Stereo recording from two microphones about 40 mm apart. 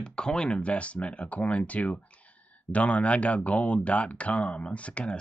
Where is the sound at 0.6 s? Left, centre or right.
Left.